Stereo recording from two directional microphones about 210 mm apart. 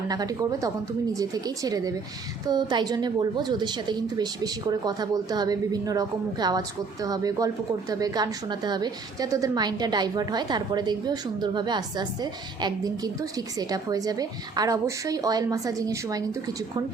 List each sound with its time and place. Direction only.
0.1 s a woman's voice: 20° right (ahead or behind)